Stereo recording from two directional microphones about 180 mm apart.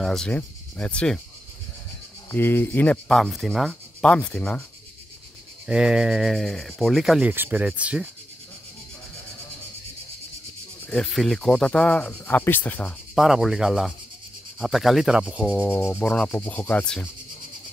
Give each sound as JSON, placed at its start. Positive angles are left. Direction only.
{"t": 0.0, "sound": "speech", "side_deg": 5}
{"t": 2.3, "sound": "speech", "side_deg": 10}
{"t": 5.7, "sound": "speech", "side_deg": -5}
{"t": 10.9, "sound": "speech", "side_deg": 0}
{"t": 15.6, "sound": "speech", "side_deg": 10}